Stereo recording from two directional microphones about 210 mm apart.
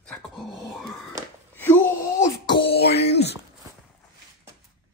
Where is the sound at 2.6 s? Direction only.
50° left (ahead or behind).